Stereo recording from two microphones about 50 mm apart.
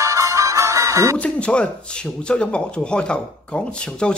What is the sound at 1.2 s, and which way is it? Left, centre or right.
Speech, left.